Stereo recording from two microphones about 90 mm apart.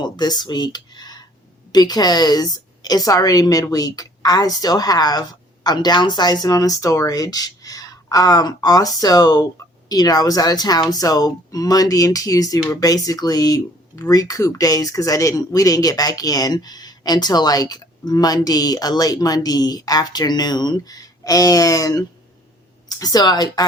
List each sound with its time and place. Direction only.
0.0 s speech: 50° left (ahead or behind)